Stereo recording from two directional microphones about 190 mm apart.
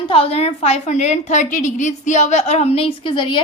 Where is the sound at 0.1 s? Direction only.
30° left (ahead or behind).